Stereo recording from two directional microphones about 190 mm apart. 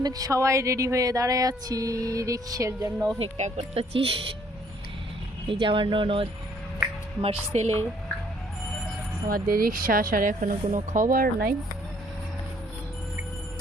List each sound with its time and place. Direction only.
0.0 s a sound: 20° right (ahead or behind)
3.2 s speech: 35° right (ahead or behind)
5.5 s speech: 25° right (ahead or behind)
9.3 s speech: 50° right (ahead or behind)